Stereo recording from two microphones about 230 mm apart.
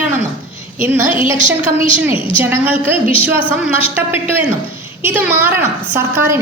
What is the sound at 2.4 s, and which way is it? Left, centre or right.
A woman's voice, centre.